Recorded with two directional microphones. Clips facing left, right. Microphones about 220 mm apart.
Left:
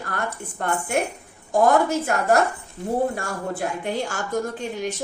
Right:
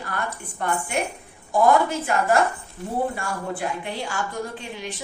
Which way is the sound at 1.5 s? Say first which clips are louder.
Left 1 dB; 45° left (ahead or behind).